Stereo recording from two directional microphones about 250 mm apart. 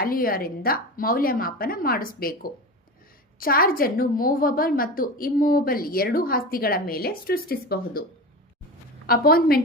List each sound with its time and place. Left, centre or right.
0.0 s a woman's voice: left
9.0 s a woman's voice: left